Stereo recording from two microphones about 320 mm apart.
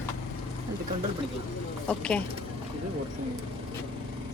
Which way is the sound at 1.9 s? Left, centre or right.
Centre.